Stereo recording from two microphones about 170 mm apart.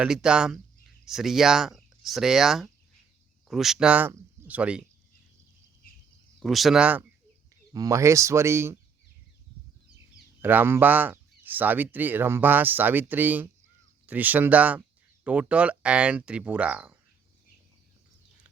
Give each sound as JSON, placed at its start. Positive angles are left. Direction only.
{"t": 0.0, "sound": "speech", "side_deg": -5}
{"t": 6.4, "sound": "speech", "side_deg": 0}
{"t": 7.5, "sound": "speech", "side_deg": -20}
{"t": 10.4, "sound": "speech", "side_deg": -10}